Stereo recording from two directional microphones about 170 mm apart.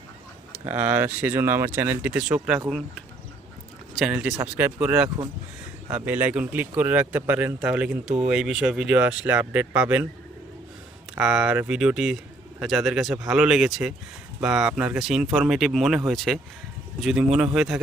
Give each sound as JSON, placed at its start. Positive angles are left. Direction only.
{"t": 0.6, "sound": "speech", "side_deg": -10}
{"t": 3.9, "sound": "speech", "side_deg": -5}
{"t": 5.0, "sound": "speech", "side_deg": -25}
{"t": 5.9, "sound": "speech", "side_deg": -10}
{"t": 11.1, "sound": "speech", "side_deg": -5}